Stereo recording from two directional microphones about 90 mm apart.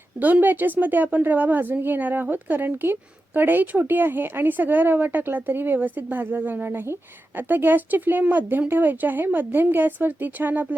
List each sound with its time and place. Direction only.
0.2 s a woman's voice: 20° right (ahead or behind)